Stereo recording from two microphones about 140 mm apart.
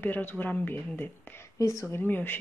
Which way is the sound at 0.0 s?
15° left (ahead or behind).